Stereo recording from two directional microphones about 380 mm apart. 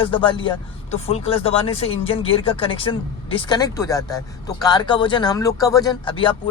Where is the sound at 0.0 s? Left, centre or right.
Centre.